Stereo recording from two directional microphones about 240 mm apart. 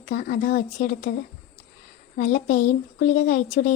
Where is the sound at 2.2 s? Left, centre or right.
Left.